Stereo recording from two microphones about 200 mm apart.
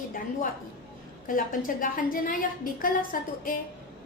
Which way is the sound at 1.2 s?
45° left (ahead or behind).